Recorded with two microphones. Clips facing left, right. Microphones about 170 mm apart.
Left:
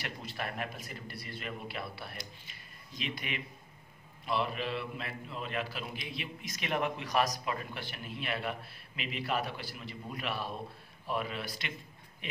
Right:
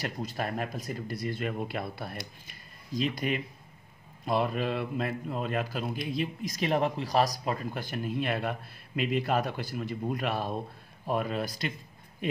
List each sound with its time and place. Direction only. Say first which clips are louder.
0.0 s a man's voice: right 6 dB; 40° right (ahead or behind)